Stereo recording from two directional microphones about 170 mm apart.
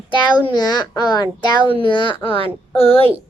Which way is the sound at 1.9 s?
30° left (ahead or behind).